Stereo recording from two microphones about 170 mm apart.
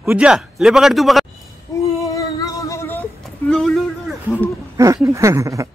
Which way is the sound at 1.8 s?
20° left (ahead or behind).